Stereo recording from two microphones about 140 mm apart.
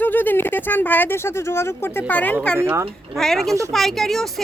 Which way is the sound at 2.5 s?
20° right (ahead or behind).